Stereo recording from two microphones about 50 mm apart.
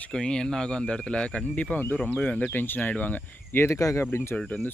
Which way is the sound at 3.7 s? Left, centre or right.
Left.